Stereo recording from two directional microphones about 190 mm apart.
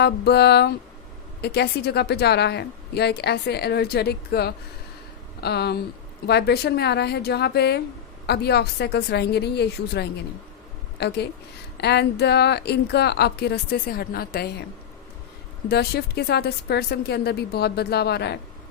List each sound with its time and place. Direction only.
0.0 s a woman's voice: 60° left (ahead or behind)
15.7 s a woman's voice: 60° left (ahead or behind)